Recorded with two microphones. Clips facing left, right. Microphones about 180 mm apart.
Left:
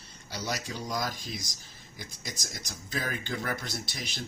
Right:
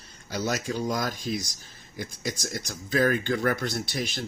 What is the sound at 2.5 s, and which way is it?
Speech, 55° right (ahead or behind).